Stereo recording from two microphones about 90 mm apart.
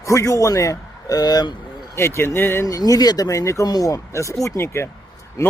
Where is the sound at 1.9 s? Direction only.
30° left (ahead or behind).